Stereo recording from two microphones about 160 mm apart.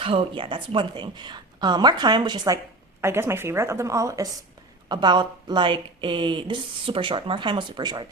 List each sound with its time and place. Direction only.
0.0 s a woman's voice: 35° right (ahead or behind)
3.0 s a woman's voice: 15° right (ahead or behind)